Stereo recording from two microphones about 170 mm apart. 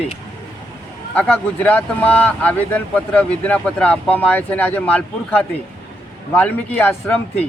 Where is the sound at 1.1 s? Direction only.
10° left (ahead or behind).